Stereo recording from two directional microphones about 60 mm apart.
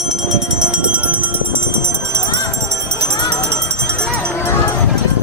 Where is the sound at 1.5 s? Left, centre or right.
Right.